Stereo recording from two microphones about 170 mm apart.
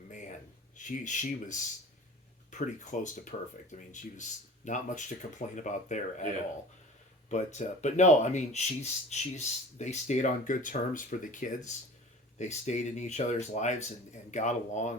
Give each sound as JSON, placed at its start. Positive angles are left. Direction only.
{"t": 0.1, "sound": "a sound", "side_deg": 45}
{"t": 0.8, "sound": "speech", "side_deg": 45}
{"t": 7.3, "sound": "speech", "side_deg": 45}